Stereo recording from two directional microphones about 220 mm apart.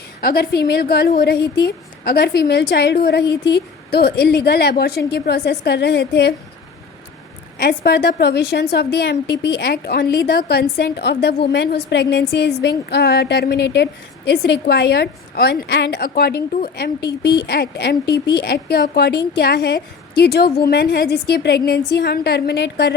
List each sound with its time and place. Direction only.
0.2 s a woman's voice: 45° left (ahead or behind)
7.6 s a woman's voice: 45° left (ahead or behind)